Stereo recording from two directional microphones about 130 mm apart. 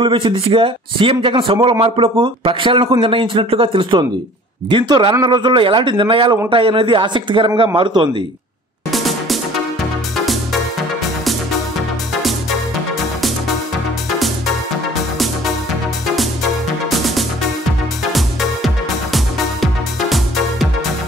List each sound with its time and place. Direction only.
0.0 s a man's voice: 40° right (ahead or behind)
8.9 s music: centre (ahead or behind)
12.2 s music: centre (ahead or behind)
16.9 s music: centre (ahead or behind)
19.1 s music: centre (ahead or behind)